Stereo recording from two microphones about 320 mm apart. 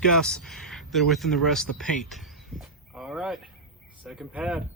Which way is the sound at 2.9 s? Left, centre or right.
Centre.